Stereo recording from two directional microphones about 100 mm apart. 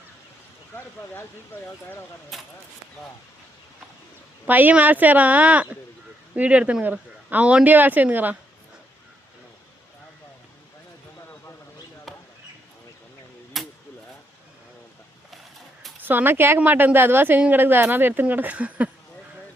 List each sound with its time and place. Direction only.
1.5 s speech: 20° left (ahead or behind)
2.3 s speech: centre (ahead or behind)
4.4 s speech: 20° right (ahead or behind)
12.1 s basketball bounce: centre (ahead or behind)
13.5 s a sound: centre (ahead or behind)
16.0 s a woman's voice: 20° right (ahead or behind)